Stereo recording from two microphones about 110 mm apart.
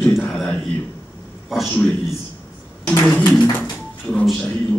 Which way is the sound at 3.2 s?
20° left (ahead or behind).